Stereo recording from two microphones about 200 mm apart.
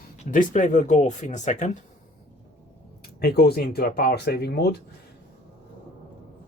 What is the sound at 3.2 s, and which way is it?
Speech, 50° left (ahead or behind).